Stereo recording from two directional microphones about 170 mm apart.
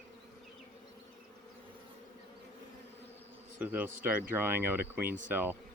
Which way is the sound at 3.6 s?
10° right (ahead or behind).